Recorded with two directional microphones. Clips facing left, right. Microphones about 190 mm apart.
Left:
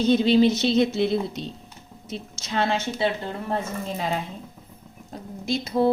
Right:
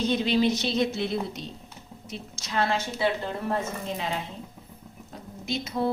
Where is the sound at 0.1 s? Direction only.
30° left (ahead or behind).